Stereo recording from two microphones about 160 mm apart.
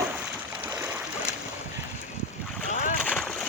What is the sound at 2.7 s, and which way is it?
Boat, 45° left (ahead or behind).